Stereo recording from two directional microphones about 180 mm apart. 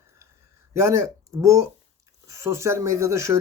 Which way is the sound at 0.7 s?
15° right (ahead or behind).